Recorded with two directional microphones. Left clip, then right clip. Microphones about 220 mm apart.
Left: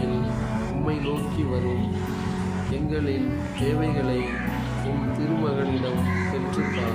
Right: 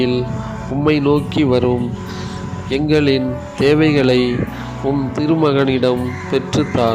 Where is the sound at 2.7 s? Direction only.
40° right (ahead or behind).